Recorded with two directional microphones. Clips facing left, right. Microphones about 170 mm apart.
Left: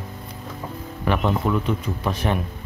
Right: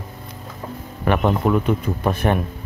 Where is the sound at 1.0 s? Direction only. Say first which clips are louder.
Right 3 dB; 55° right (ahead or behind).